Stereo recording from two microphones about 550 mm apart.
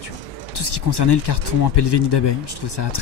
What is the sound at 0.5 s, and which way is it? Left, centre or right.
Speech, left.